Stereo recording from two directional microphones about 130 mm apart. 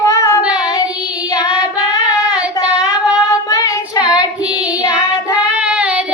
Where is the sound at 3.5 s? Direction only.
25° left (ahead or behind).